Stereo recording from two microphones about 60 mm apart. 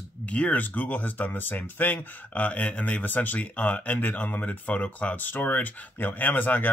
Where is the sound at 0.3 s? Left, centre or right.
Left.